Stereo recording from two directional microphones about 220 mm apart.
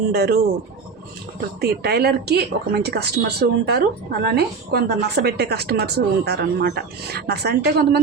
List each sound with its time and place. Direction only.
0.1 s speech: 45° right (ahead or behind)
1.6 s speech: 45° right (ahead or behind)